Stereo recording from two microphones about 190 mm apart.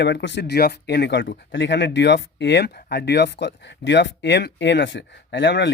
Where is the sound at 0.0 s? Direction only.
65° left (ahead or behind).